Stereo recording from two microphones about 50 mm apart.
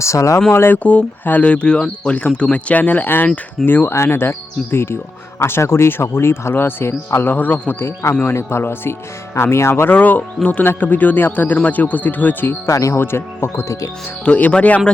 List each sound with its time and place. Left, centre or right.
0.0 s speech: left
0.5 s speech: left
0.8 s speech: left
1.2 s a man's voice: left
1.5 s a man's voice: left
3.8 s a man's voice: left
7.7 s speech: left
9.3 s speech: left
9.9 s a man's voice: left
12.6 s speech: left
13.0 s speech: left
14.3 s a man's voice: left